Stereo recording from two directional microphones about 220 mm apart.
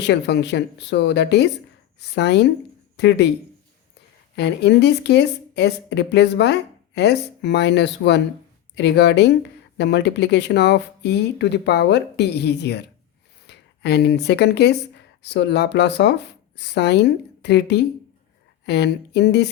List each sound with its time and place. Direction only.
0.0 s speech: 50° left (ahead or behind)
4.4 s speech: 50° left (ahead or behind)